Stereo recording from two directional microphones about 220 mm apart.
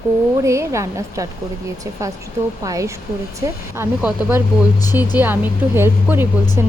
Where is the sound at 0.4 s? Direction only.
15° right (ahead or behind).